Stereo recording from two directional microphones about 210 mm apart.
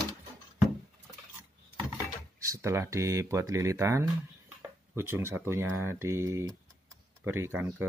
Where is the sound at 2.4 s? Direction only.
15° right (ahead or behind).